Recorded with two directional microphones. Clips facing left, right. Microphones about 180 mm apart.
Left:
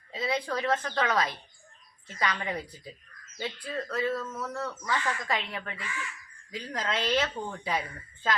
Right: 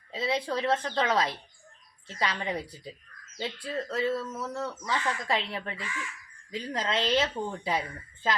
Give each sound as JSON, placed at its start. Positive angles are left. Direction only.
{"t": 0.1, "sound": "a woman's voice", "side_deg": -25}